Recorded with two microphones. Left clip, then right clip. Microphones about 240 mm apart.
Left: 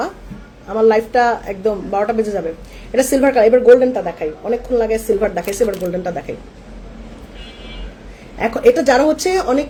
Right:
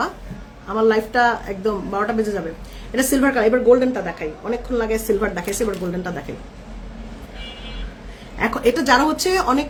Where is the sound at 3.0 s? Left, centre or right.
Centre.